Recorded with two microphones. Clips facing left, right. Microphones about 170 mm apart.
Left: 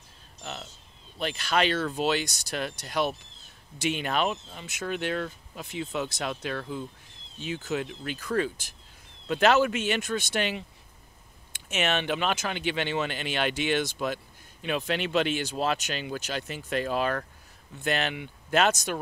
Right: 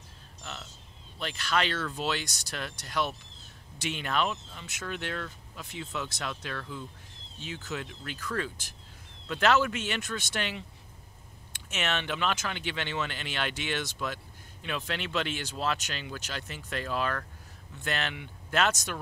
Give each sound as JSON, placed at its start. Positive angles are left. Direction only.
{"t": 1.2, "sound": "speech", "side_deg": 15}
{"t": 13.9, "sound": "a sound", "side_deg": 15}
{"t": 14.9, "sound": "speech", "side_deg": 15}